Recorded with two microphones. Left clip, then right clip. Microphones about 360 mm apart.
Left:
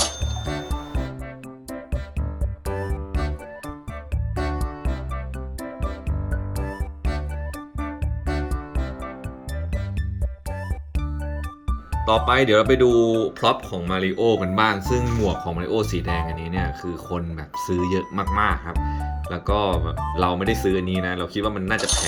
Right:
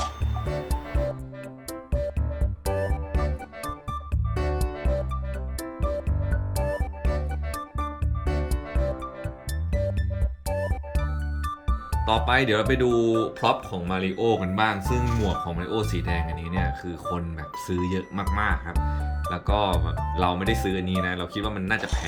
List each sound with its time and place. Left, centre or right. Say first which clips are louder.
0.4 s music: even; centre
2.6 s music: right 2 dB; centre
10.5 s music: right 7 dB; centre
12.0 s speech: left 4 dB; centre